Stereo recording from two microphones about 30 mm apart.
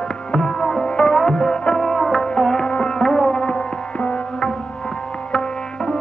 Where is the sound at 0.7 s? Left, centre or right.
Left.